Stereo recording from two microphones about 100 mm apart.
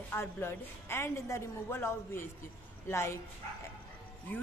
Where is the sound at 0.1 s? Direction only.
25° left (ahead or behind).